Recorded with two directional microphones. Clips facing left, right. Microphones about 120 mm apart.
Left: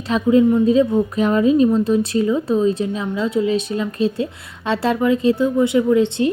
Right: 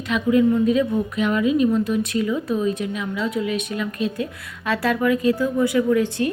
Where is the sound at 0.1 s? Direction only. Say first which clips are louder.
Left 4 dB; 30° left (ahead or behind).